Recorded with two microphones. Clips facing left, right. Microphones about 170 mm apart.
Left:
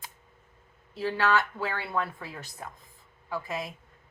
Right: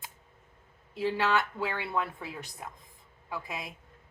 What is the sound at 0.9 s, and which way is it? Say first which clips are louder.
Speech: left 1 dB; 15° right (ahead or behind).